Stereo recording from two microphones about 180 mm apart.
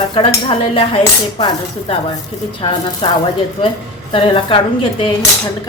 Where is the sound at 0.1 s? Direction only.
30° left (ahead or behind).